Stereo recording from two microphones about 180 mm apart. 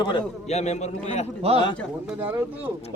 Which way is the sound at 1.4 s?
35° right (ahead or behind).